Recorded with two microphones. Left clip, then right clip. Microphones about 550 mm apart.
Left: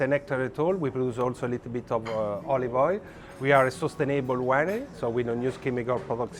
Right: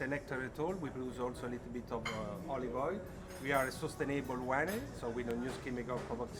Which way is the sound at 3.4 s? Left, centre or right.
Left.